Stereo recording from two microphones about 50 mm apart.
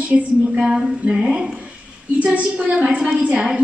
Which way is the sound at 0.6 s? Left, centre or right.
Centre.